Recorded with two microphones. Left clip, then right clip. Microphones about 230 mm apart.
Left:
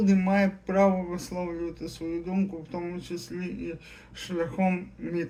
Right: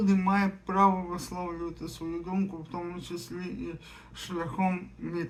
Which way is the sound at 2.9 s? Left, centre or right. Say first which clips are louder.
Left 2 dB; centre.